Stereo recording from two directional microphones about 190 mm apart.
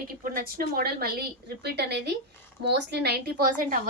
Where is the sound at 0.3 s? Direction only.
50° right (ahead or behind).